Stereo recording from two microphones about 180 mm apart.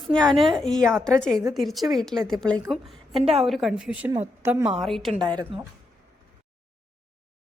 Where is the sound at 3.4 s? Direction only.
Centre (ahead or behind).